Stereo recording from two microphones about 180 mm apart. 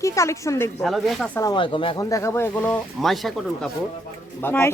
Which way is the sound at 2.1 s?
15° left (ahead or behind).